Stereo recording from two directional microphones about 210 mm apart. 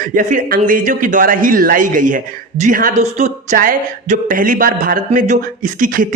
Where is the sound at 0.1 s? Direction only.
40° right (ahead or behind).